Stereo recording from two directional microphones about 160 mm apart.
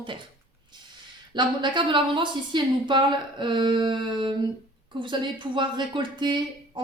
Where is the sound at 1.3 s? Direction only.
30° right (ahead or behind).